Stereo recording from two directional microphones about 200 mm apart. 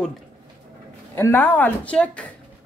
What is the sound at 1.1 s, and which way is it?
Speech, 10° left (ahead or behind).